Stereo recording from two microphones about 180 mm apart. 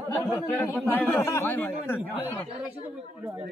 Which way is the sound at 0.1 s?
15° left (ahead or behind).